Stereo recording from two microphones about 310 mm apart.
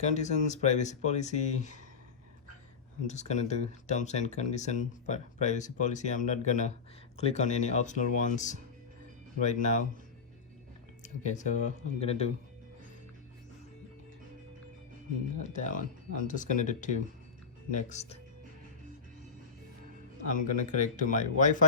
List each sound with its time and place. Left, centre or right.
0.0 s speech: left
3.1 s speech: left
11.0 s speech: left
15.5 s speech: left
20.3 s speech: left